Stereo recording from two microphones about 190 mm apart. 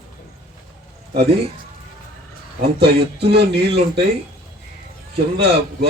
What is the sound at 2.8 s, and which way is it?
Speech, 60° right (ahead or behind).